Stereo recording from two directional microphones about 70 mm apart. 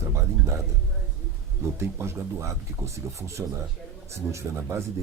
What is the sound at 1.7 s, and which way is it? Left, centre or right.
Speech, right.